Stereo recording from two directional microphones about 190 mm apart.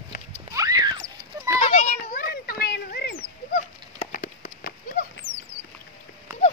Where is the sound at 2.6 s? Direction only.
55° left (ahead or behind).